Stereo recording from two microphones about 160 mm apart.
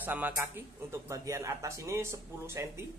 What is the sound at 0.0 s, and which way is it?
Speech, 10° right (ahead or behind).